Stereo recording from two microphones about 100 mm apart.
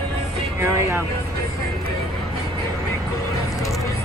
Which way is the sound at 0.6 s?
25° right (ahead or behind).